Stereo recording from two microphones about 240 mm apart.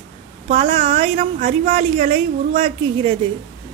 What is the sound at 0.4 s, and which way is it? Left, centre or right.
A woman's voice, right.